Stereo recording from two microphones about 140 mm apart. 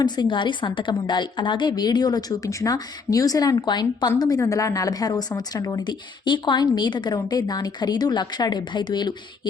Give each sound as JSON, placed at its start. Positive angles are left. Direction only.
{"t": 0.0, "sound": "speech", "side_deg": 35}